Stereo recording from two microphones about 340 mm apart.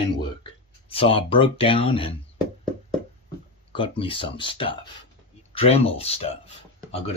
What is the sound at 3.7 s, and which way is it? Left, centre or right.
Speech, centre.